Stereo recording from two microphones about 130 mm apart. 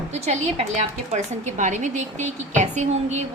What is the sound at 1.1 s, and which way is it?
A woman's voice, 70° right (ahead or behind).